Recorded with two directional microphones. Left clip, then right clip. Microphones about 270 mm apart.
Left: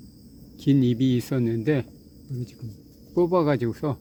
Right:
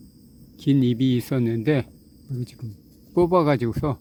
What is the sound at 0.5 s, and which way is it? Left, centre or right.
Speech, centre.